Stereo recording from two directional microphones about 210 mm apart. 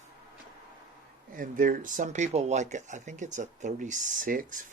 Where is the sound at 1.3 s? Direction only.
40° right (ahead or behind).